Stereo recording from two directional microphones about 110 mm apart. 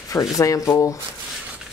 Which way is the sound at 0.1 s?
30° left (ahead or behind).